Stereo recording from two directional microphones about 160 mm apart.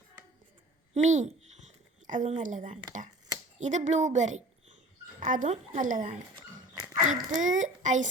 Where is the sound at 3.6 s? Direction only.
50° right (ahead or behind).